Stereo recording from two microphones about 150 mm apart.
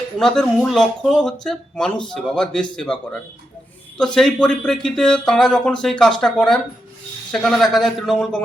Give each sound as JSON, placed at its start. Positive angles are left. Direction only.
{"t": 0.2, "sound": "speech", "side_deg": 5}